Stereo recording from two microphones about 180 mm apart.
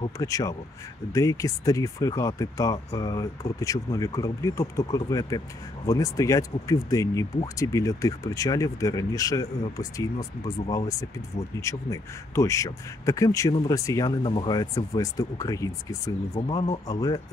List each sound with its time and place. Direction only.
0.2 s speech: 20° left (ahead or behind)